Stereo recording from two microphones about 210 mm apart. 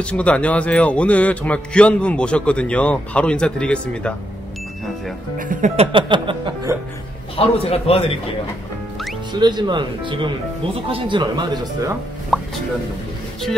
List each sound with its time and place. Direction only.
0.0 s speech: 5° left (ahead or behind)
5.4 s speech: 40° right (ahead or behind)
5.9 s speech: 25° right (ahead or behind)
7.3 s a man's voice: 30° left (ahead or behind)
9.3 s speech: 20° right (ahead or behind)
12.3 s speech: centre (ahead or behind)